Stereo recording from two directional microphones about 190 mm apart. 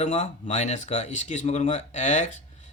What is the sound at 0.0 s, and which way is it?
Speech, 35° left (ahead or behind).